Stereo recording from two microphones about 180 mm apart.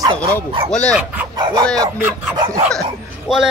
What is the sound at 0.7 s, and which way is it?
Speech, 5° left (ahead or behind).